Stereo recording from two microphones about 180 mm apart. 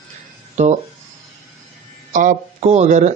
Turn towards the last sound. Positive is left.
turn(degrees=-40)  # may be behind; listen again after turning